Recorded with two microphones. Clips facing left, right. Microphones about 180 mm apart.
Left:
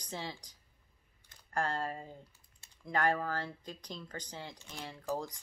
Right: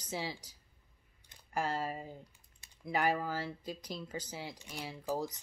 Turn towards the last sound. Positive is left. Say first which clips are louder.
# right 1 dB
turn(degrees=-10)  # may be behind; listen again after turning